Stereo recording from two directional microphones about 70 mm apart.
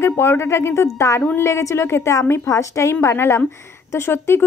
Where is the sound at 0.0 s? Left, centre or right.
Left.